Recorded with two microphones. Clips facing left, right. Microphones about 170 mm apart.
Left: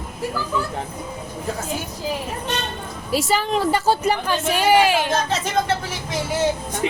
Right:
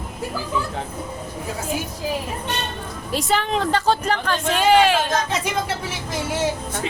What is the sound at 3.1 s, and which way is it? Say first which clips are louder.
Speech: left 1 dB; 5° left (ahead or behind).